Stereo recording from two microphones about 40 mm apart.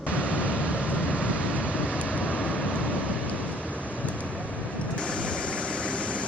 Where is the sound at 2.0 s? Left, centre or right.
Left.